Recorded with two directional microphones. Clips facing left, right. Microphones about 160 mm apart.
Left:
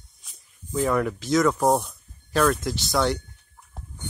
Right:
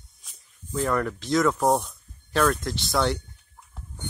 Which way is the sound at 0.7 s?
5° left (ahead or behind).